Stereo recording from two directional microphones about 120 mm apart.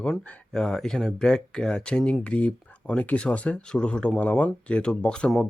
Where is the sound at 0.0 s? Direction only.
5° left (ahead or behind).